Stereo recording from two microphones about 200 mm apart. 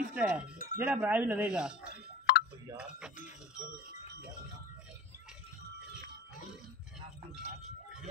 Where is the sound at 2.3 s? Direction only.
55° left (ahead or behind).